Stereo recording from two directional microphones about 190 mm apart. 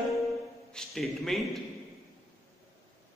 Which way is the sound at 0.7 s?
Centre (ahead or behind).